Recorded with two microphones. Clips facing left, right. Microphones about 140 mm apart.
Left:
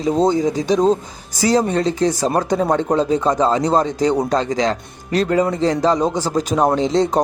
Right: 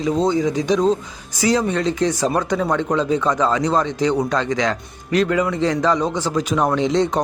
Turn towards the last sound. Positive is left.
turn(degrees=35)  # may be behind; listen again after turning